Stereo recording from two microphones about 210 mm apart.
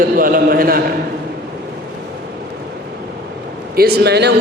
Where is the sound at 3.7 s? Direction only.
50° right (ahead or behind).